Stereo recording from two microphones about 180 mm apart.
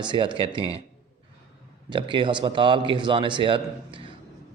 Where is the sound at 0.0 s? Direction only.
25° right (ahead or behind).